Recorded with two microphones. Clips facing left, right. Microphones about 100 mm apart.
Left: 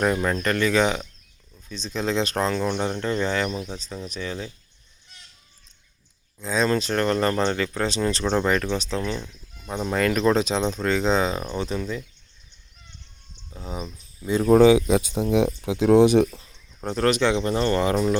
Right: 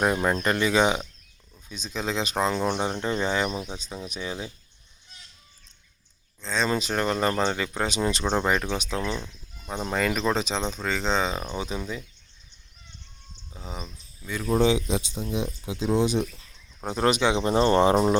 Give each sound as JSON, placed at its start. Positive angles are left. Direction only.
{"t": 0.0, "sound": "speech", "side_deg": -15}
{"t": 6.4, "sound": "speech", "side_deg": 5}
{"t": 6.7, "sound": "speech", "side_deg": -10}
{"t": 9.6, "sound": "speech", "side_deg": -5}
{"t": 13.5, "sound": "speech", "side_deg": 0}
{"t": 14.4, "sound": "speech", "side_deg": 65}
{"t": 16.8, "sound": "speech", "side_deg": -15}